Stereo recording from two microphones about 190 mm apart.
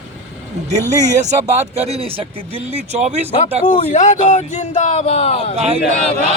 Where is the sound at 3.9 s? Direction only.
40° left (ahead or behind).